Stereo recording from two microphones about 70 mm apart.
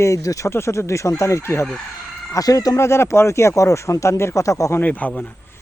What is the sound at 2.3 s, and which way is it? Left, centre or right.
Speech, left.